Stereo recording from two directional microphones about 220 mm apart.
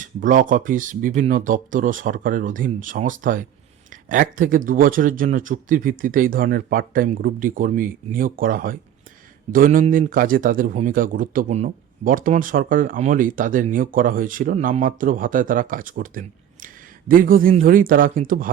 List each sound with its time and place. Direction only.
0.0 s speech: 35° right (ahead or behind)